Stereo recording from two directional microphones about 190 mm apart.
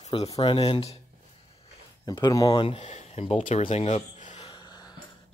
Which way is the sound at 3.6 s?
35° left (ahead or behind).